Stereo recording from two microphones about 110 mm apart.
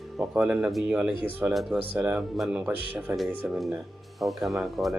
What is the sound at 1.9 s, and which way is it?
Speech, 15° right (ahead or behind).